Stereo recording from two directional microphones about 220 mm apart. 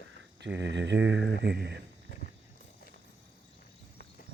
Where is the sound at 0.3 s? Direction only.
50° right (ahead or behind).